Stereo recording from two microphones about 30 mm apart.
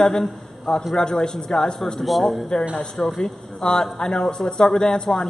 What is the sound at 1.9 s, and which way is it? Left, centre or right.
Speech, centre.